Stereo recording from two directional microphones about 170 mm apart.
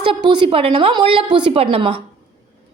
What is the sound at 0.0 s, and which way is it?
A woman's voice, 30° right (ahead or behind).